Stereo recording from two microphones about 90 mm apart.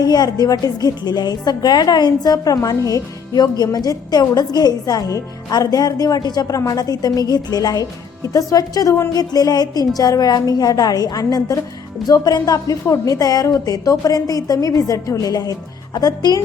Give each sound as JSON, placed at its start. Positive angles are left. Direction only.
{"t": 0.0, "sound": "a woman's voice", "side_deg": 50}